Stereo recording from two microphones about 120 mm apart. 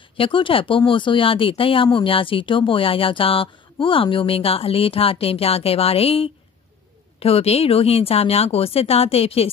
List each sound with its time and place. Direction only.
0.2 s a woman's voice: 45° left (ahead or behind)